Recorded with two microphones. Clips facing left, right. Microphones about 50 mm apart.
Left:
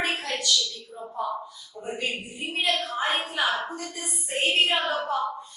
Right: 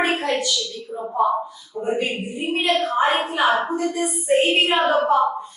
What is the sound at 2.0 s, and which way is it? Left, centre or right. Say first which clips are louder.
Speech: right 7 dB; right.